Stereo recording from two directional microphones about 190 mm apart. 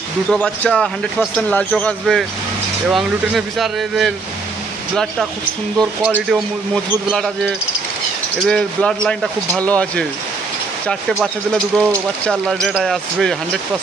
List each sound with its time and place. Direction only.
0.3 s speech: 5° left (ahead or behind)
6.1 s speech: centre (ahead or behind)